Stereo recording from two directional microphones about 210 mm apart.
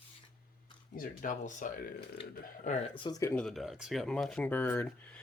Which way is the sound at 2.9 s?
20° left (ahead or behind).